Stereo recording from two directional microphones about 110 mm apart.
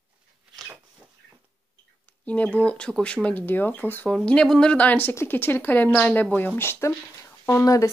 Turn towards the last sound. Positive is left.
turn(degrees=30)  # may be behind; listen again after turning